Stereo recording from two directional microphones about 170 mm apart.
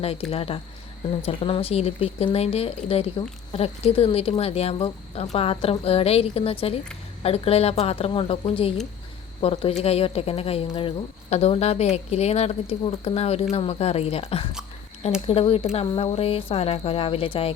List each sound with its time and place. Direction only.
0.0 s speech: 35° left (ahead or behind)